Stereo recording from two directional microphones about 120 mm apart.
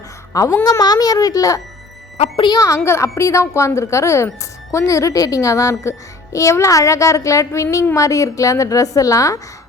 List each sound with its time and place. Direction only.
0.3 s a woman's voice: 30° left (ahead or behind)
2.1 s speech: 60° left (ahead or behind)
2.4 s speech: 30° left (ahead or behind)